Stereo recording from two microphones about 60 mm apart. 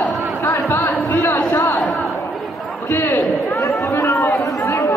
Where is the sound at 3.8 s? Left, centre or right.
Left.